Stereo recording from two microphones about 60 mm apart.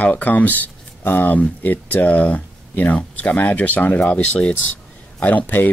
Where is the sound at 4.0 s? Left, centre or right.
Centre.